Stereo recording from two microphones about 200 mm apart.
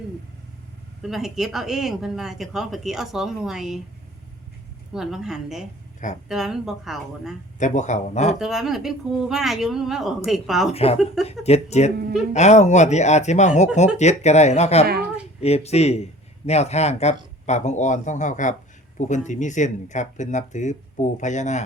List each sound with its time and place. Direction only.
1.0 s speech: centre (ahead or behind)
4.9 s speech: centre (ahead or behind)
7.6 s speech: 35° left (ahead or behind)
8.4 s speech: centre (ahead or behind)
10.7 s speech: 30° left (ahead or behind)
14.8 s speech: 50° right (ahead or behind)
15.4 s speech: 30° left (ahead or behind)